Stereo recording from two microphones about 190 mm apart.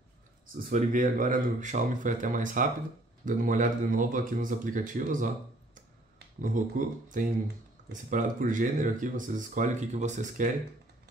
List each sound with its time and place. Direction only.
0.7 s speech: 45° right (ahead or behind)
6.1 s a sound: 50° right (ahead or behind)
7.1 s speech: 45° right (ahead or behind)